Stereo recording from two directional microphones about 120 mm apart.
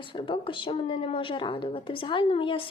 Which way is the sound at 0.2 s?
45° left (ahead or behind).